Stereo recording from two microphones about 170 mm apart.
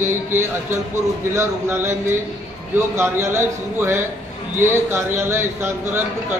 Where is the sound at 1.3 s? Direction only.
15° right (ahead or behind).